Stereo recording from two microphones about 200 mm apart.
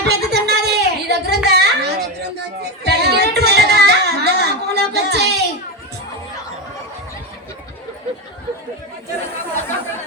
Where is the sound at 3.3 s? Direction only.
55° right (ahead or behind).